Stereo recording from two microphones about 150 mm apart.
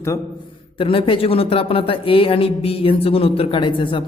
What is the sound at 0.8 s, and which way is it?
A man's voice, 35° left (ahead or behind).